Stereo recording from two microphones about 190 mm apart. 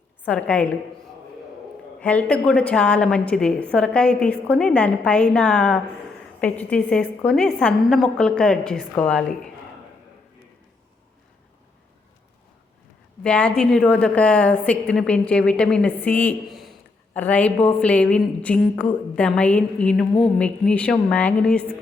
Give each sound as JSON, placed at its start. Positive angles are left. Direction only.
{"t": 0.3, "sound": "a woman's voice", "side_deg": 5}
{"t": 2.0, "sound": "a woman's voice", "side_deg": 5}
{"t": 13.2, "sound": "a woman's voice", "side_deg": 5}